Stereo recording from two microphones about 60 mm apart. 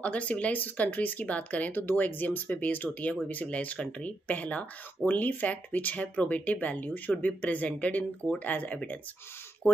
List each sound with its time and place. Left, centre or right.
0.0 s speech: left